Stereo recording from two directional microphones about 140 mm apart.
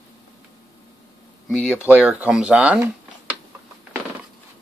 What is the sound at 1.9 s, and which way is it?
Speech, 10° right (ahead or behind).